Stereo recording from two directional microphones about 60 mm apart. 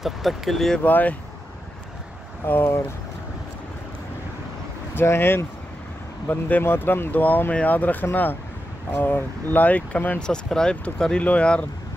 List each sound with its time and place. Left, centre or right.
0.0 s speech: centre
0.8 s speech: left
2.4 s speech: left
4.9 s speech: left; by 11.6 s centre